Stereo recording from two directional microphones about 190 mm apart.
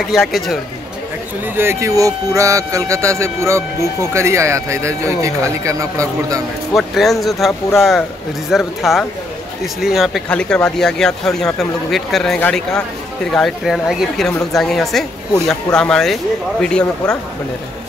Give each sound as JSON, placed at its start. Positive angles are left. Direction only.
{"t": 0.0, "sound": "speech", "side_deg": 0}
{"t": 1.4, "sound": "speech", "side_deg": -10}
{"t": 6.7, "sound": "speech", "side_deg": 0}